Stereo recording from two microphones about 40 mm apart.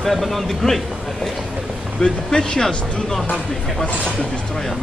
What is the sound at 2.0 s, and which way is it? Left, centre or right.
Speech, centre.